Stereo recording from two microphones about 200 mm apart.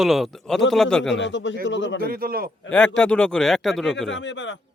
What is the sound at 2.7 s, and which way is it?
Speech, 5° left (ahead or behind).